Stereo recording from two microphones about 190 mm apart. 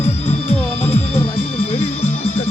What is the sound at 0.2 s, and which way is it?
Music, 30° left (ahead or behind).